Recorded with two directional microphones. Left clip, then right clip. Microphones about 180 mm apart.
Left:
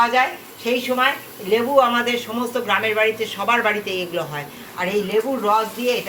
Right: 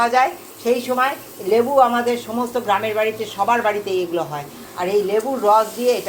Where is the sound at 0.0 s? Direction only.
55° right (ahead or behind).